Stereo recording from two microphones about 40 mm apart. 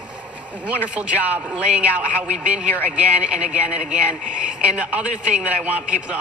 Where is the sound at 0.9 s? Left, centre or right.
Right.